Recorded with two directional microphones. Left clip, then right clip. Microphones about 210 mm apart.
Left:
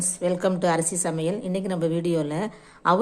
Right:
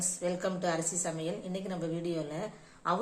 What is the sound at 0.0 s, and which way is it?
A woman's voice, 30° left (ahead or behind).